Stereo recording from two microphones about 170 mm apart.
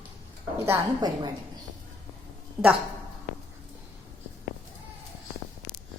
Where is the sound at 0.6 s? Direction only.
20° right (ahead or behind).